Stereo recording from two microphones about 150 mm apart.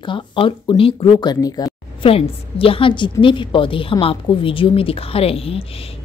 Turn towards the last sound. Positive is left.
turn(degrees=40)  # may be behind; listen again after turning